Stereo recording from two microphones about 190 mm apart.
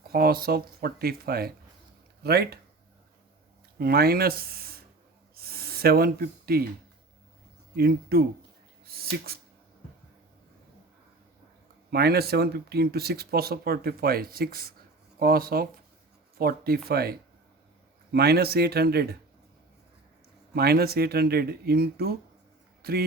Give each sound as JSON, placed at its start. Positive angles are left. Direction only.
{"t": 0.1, "sound": "speech", "side_deg": -50}
{"t": 3.8, "sound": "speech", "side_deg": -55}
{"t": 5.3, "sound": "gasp", "side_deg": -55}
{"t": 7.8, "sound": "speech", "side_deg": -55}
{"t": 11.9, "sound": "speech", "side_deg": -55}
{"t": 20.6, "sound": "speech", "side_deg": -55}